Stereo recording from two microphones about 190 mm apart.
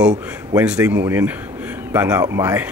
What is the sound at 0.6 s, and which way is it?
Speech, 5° right (ahead or behind).